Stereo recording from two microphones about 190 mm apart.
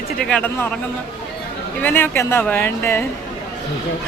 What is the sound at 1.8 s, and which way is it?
A woman's voice, 10° left (ahead or behind).